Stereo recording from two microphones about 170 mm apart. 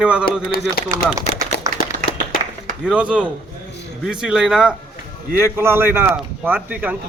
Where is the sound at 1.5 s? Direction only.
65° left (ahead or behind).